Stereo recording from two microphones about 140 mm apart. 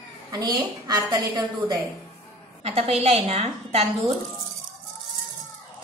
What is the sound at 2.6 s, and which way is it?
A woman's voice, 50° right (ahead or behind).